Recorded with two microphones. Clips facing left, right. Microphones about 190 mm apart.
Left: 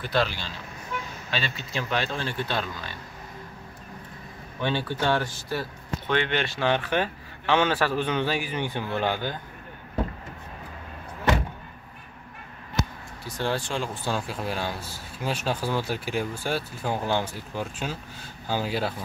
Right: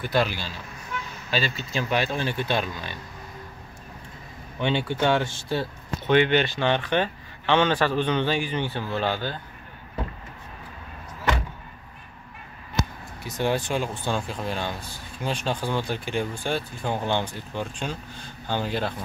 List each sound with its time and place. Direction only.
0.1 s speech: 10° right (ahead or behind)
1.9 s speech: 10° right (ahead or behind)
4.6 s speech: 25° right (ahead or behind)
6.3 s speech: centre (ahead or behind)
13.2 s speech: 15° right (ahead or behind)
14.0 s speech: 5° left (ahead or behind)